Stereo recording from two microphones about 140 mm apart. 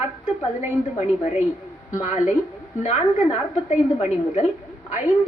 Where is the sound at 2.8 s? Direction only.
45° left (ahead or behind).